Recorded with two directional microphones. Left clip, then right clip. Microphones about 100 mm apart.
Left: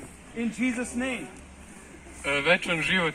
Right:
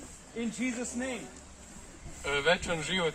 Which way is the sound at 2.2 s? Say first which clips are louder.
Left 4 dB; 5° right (ahead or behind).